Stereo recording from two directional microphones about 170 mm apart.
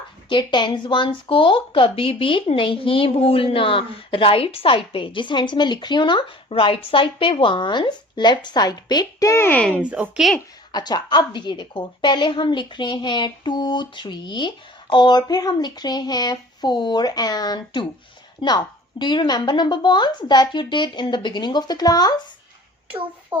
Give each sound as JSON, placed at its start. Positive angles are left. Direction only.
{"t": 0.3, "sound": "speech", "side_deg": 30}
{"t": 9.8, "sound": "speech", "side_deg": -5}
{"t": 10.7, "sound": "speech", "side_deg": 25}
{"t": 23.3, "sound": "speech", "side_deg": -10}